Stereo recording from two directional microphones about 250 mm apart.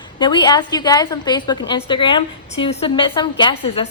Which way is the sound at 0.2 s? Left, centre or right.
Centre.